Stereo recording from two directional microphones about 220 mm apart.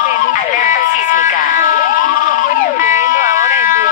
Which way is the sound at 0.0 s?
35° left (ahead or behind).